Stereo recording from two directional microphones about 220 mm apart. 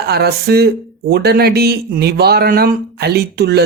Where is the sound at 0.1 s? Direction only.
45° right (ahead or behind).